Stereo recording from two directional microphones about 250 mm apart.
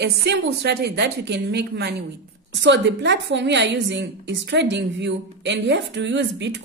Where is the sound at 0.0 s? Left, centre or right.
Right.